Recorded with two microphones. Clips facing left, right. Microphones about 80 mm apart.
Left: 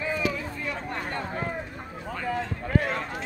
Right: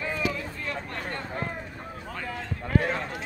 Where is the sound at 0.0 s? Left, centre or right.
Centre.